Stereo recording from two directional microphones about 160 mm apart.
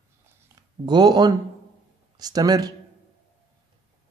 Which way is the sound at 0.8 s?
25° right (ahead or behind).